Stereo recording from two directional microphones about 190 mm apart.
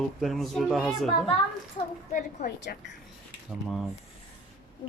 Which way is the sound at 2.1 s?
55° left (ahead or behind).